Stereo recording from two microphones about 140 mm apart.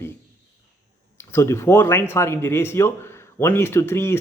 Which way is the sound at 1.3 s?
20° left (ahead or behind).